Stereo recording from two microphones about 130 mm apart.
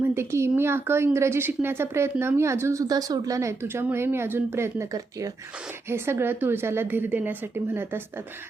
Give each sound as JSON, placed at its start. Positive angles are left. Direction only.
{"t": 0.0, "sound": "a woman's voice", "side_deg": -15}